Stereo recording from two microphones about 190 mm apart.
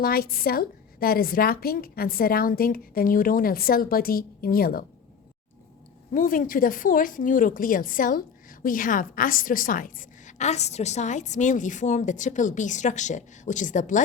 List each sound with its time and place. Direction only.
0.0 s a woman's voice: 50° left (ahead or behind)
6.1 s a woman's voice: 45° left (ahead or behind)